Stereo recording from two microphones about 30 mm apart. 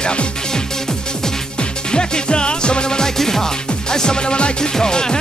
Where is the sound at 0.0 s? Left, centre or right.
Left.